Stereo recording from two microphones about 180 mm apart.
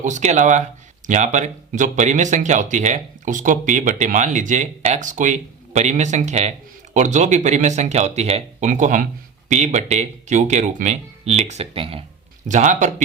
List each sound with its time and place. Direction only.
0.0 s speech: 40° right (ahead or behind)
12.5 s speech: 45° right (ahead or behind)